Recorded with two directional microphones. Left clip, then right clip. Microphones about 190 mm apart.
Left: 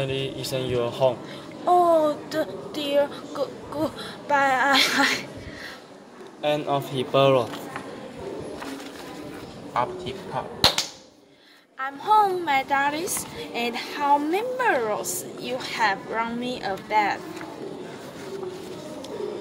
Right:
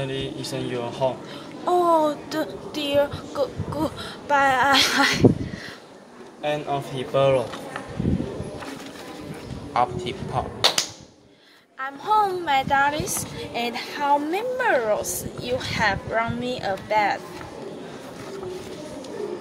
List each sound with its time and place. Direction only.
0.0 s speech: 35° left (ahead or behind)
1.7 s a woman's voice: centre (ahead or behind)
6.4 s speech: 35° left (ahead or behind)
10.4 s speech: 40° right (ahead or behind)
11.8 s a woman's voice: centre (ahead or behind)